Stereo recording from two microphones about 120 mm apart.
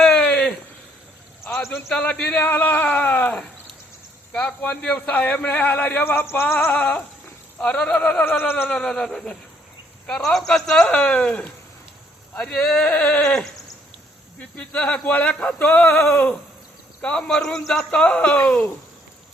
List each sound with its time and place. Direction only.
0.0 s a sound: 10° left (ahead or behind)
1.9 s a man's voice: 5° left (ahead or behind)
8.7 s a man's voice: 5° left (ahead or behind)